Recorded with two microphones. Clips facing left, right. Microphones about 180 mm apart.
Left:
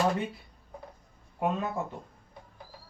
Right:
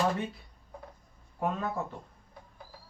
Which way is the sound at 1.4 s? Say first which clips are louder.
Left 2 dB; 15° left (ahead or behind).